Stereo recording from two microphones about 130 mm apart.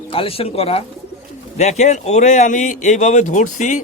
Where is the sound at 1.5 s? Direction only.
60° left (ahead or behind).